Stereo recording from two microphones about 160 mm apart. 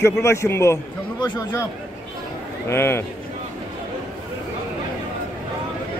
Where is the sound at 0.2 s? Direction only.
15° left (ahead or behind).